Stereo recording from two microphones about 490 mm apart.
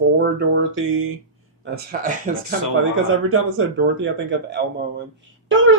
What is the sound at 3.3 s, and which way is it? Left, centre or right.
Speech, right.